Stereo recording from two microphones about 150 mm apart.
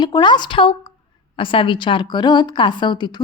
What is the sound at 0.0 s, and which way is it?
A woman's voice, 30° left (ahead or behind).